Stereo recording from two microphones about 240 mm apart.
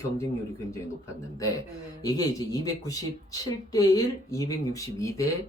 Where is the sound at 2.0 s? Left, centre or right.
Centre.